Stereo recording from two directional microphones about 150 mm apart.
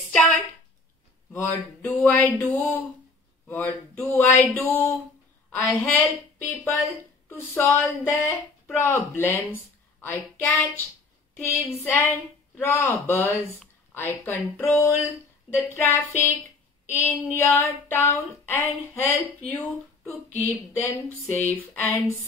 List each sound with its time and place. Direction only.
0.1 s a sound: 5° left (ahead or behind)
1.3 s a woman's voice: 10° left (ahead or behind)
11.3 s a woman's voice: 15° left (ahead or behind)